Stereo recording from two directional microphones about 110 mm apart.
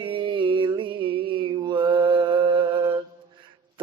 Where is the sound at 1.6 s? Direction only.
45° right (ahead or behind).